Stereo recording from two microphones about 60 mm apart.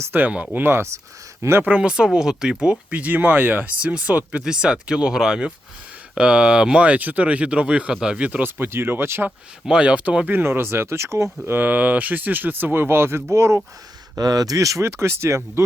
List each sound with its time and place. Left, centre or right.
0.1 s speech: right
0.5 s speech: right
1.4 s speech: right
1.6 s speech: centre
8.3 s speech: right
9.6 s speech: centre
10.4 s speech: right
11.5 s speech: right
14.2 s speech: right